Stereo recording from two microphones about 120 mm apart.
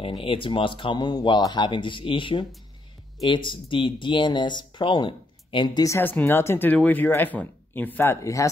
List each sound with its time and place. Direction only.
0.0 s speech: 50° left (ahead or behind)
5.9 s speech: 15° left (ahead or behind)